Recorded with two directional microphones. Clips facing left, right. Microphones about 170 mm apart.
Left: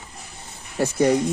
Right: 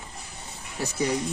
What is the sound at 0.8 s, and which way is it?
Speech, 60° left (ahead or behind).